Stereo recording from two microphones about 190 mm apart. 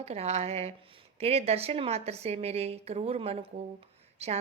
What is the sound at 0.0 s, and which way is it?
A woman's voice, 35° right (ahead or behind).